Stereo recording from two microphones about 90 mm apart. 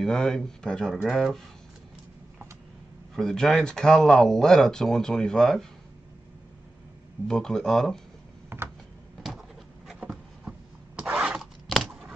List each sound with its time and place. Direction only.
0.0 s speech: 5° left (ahead or behind)
3.2 s speech: 5° left (ahead or behind)
7.2 s speech: 5° left (ahead or behind)
8.5 s a sound: 30° right (ahead or behind)
11.0 s a sound: 10° right (ahead or behind)
11.6 s keys jangling: centre (ahead or behind)